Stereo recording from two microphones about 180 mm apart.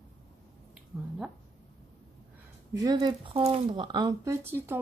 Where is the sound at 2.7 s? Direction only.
20° right (ahead or behind).